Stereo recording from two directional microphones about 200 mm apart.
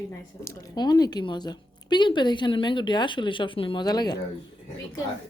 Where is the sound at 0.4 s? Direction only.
20° left (ahead or behind).